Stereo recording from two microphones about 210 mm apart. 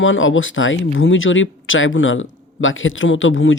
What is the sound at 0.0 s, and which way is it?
Speech, 65° left (ahead or behind).